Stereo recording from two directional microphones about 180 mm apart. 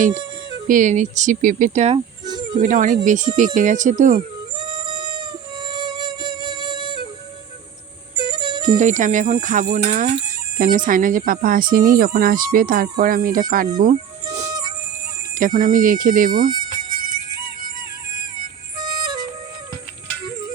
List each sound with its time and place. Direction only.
0.7 s speech: 45° right (ahead or behind)
4.5 s music: 25° right (ahead or behind)
8.2 s music: 25° right (ahead or behind)
8.8 s speech: 45° right (ahead or behind)
13.7 s a sound: 45° right (ahead or behind)
15.4 s speech: 50° right (ahead or behind)
18.8 s music: 25° right (ahead or behind)